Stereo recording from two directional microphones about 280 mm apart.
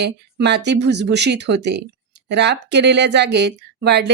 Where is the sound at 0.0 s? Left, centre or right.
Right.